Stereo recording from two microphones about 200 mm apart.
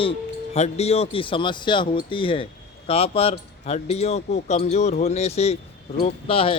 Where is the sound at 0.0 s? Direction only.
30° left (ahead or behind).